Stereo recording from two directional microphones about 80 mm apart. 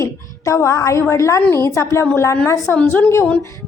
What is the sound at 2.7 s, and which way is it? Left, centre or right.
Speech, left.